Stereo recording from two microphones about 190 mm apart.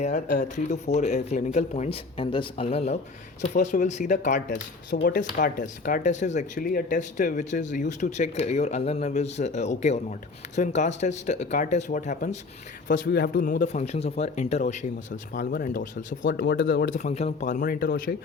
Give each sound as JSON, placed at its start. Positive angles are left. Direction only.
{"t": 0.0, "sound": "speech", "side_deg": 40}
{"t": 12.9, "sound": "speech", "side_deg": 55}
{"t": 16.2, "sound": "speech", "side_deg": 60}
{"t": 16.8, "sound": "speech", "side_deg": 45}